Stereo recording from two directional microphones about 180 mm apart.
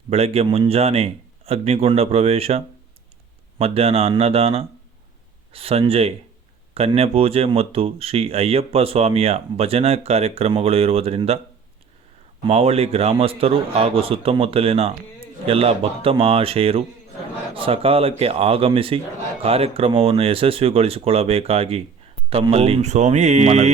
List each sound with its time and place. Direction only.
0.1 s speech: 35° right (ahead or behind)
12.5 s speech: 35° right (ahead or behind)